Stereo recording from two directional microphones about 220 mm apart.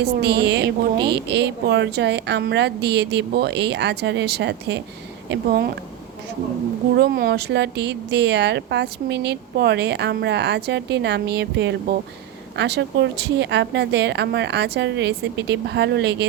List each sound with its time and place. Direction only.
0.0 s speech: 50° right (ahead or behind)
6.9 s speech: 45° right (ahead or behind)